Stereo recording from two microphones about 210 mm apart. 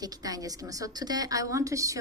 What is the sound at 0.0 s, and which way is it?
A woman's voice, 15° right (ahead or behind).